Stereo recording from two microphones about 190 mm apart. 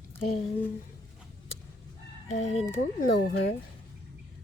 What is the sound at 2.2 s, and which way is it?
Chicken, 35° left (ahead or behind).